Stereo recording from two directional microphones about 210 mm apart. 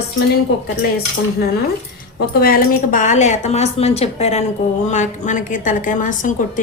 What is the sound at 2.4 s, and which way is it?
A woman's voice, 40° left (ahead or behind).